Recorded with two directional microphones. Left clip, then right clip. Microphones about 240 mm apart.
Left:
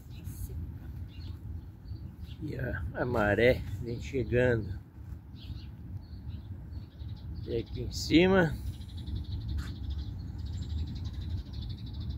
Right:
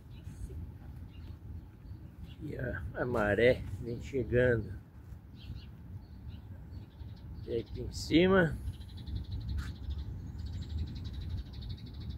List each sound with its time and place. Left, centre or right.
2.4 s speech: centre
7.5 s speech: centre
10.6 s a sound: centre